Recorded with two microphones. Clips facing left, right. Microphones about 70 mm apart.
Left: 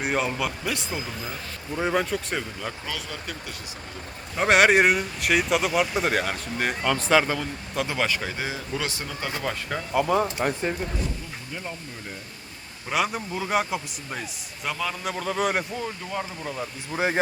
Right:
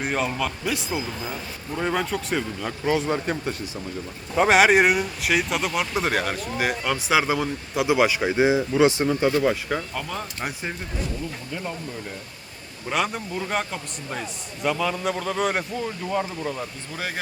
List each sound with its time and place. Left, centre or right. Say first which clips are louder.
0.0 s speech: right 1 dB; centre
2.8 s speech: right 11 dB; right
4.4 s speech: right 2 dB; centre; by 9.3 s right
9.4 s speech: right 6 dB; centre
9.9 s speech: left 9 dB; centre
12.9 s speech: even; centre
16.9 s speech: left 8 dB; left